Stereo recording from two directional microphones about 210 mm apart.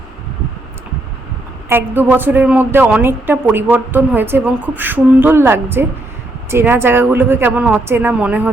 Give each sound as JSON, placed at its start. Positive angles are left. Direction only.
{"t": 1.7, "sound": "a woman's voice", "side_deg": -10}